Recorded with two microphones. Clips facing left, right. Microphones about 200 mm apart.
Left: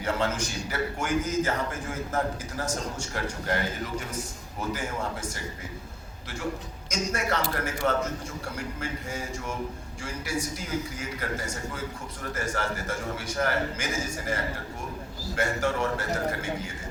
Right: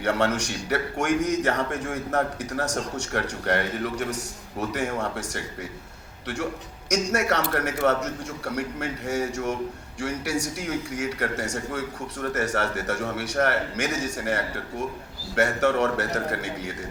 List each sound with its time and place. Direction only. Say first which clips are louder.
0.0 s a man's voice: right 4 dB; 70° right (ahead or behind)